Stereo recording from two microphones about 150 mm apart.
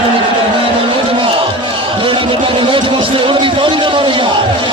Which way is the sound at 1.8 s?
35° right (ahead or behind).